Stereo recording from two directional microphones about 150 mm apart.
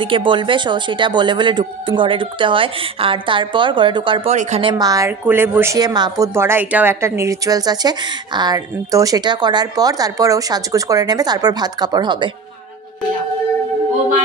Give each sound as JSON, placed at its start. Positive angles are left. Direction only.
{"t": 0.0, "sound": "speech", "side_deg": -35}
{"t": 4.3, "sound": "speech", "side_deg": -50}
{"t": 4.6, "sound": "a woman's voice", "side_deg": -25}
{"t": 5.2, "sound": "a woman's voice", "side_deg": -15}